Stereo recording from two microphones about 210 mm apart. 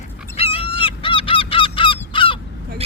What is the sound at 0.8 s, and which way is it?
Honk, 25° left (ahead or behind).